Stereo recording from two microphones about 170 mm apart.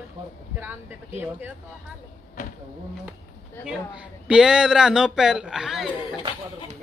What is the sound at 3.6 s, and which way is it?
Speech, 5° right (ahead or behind).